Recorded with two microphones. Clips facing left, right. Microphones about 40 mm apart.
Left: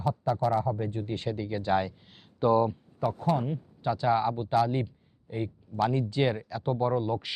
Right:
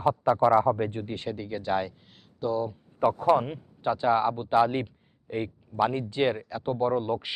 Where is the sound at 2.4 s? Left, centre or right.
Left.